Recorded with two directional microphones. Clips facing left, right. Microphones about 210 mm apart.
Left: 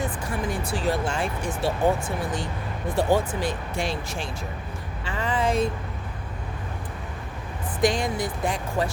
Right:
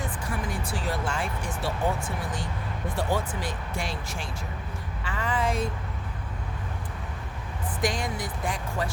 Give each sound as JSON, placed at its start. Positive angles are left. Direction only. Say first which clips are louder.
{"t": 0.0, "sound": "speech", "louder": "left 4 dB", "side_deg": 25}
{"t": 7.8, "sound": "speech", "louder": "left 6 dB", "side_deg": 25}